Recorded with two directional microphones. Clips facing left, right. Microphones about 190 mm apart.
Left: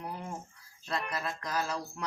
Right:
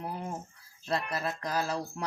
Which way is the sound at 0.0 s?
35° right (ahead or behind).